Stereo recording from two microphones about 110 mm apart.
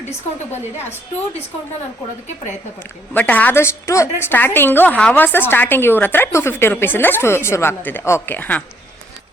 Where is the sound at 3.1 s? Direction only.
15° left (ahead or behind).